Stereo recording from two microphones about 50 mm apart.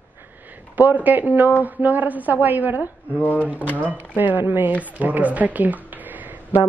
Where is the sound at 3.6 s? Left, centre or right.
Left.